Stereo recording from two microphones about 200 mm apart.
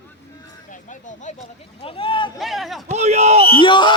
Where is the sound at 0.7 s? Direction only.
40° left (ahead or behind).